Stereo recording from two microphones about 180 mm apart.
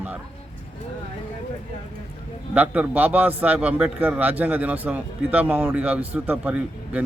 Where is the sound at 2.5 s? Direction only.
5° right (ahead or behind).